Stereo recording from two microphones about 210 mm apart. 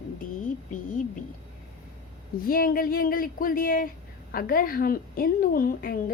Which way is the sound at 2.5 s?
45° left (ahead or behind).